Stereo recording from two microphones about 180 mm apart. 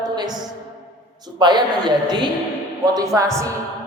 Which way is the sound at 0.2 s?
20° right (ahead or behind).